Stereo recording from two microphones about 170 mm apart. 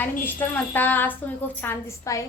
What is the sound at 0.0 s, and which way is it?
A woman's voice, 10° left (ahead or behind).